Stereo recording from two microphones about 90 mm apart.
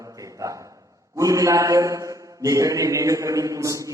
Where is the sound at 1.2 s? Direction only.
35° right (ahead or behind).